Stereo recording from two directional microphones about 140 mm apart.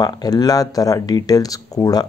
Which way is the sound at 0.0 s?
30° left (ahead or behind).